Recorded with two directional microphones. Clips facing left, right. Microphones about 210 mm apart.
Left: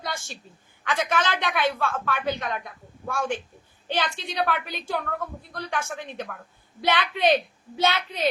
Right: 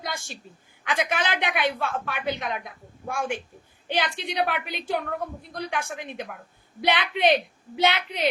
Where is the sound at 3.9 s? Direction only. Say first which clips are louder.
Right 1 dB; 15° right (ahead or behind).